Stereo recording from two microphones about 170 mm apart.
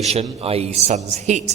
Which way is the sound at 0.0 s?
40° right (ahead or behind).